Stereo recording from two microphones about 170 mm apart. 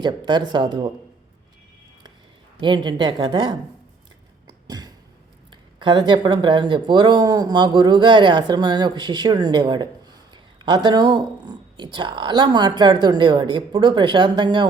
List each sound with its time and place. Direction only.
0.0 s speech: 25° right (ahead or behind)
2.6 s speech: 25° right (ahead or behind)
4.4 s cough: 25° right (ahead or behind)
5.8 s speech: 25° right (ahead or behind)